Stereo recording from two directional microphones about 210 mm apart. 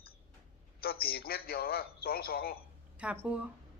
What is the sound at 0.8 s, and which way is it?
A man's voice, 45° left (ahead or behind).